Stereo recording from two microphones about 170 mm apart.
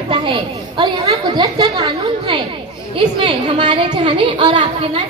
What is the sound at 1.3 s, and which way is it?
A woman's voice, 25° right (ahead or behind).